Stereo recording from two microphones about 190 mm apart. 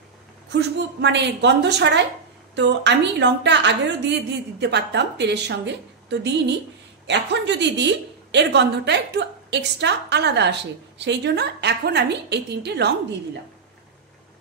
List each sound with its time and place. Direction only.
0.5 s a woman's voice: 65° right (ahead or behind)